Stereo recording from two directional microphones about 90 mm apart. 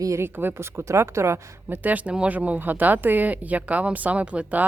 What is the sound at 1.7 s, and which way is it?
Speech, 20° right (ahead or behind).